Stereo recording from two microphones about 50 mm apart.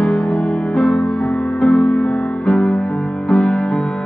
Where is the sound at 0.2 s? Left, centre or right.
Left.